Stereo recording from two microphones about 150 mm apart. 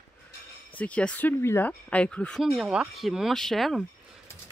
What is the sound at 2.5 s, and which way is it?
Speech, 5° right (ahead or behind).